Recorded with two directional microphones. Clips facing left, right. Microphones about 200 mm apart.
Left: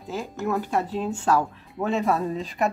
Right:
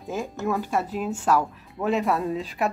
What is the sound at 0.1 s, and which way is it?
Speech, 10° right (ahead or behind).